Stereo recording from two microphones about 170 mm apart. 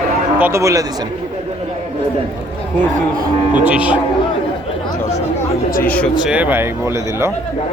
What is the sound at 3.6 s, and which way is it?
Speech, 10° right (ahead or behind).